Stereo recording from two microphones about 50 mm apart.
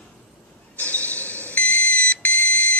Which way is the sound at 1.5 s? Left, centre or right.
Left.